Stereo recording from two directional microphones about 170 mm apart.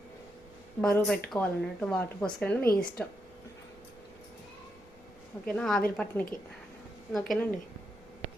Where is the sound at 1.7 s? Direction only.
5° left (ahead or behind).